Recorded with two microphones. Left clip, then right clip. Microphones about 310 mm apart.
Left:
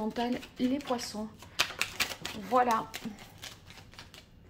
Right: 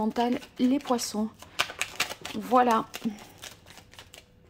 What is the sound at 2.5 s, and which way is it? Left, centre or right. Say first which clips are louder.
Speech: right 4 dB; right.